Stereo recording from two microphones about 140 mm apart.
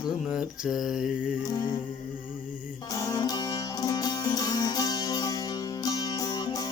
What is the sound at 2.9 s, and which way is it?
Music, 25° left (ahead or behind).